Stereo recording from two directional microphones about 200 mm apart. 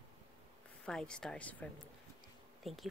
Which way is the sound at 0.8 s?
5° left (ahead or behind).